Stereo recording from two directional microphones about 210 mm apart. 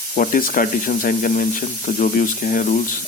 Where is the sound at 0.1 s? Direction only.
40° left (ahead or behind).